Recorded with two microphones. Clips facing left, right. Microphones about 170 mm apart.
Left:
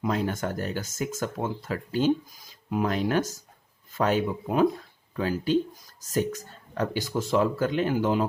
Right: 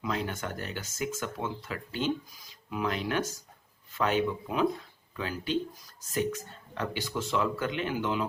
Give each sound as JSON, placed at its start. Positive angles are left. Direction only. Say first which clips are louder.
{"t": 0.0, "sound": "speech", "louder": "left 6 dB", "side_deg": 40}